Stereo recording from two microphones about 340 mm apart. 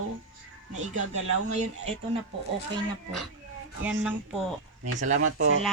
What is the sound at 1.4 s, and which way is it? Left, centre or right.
Speech, centre.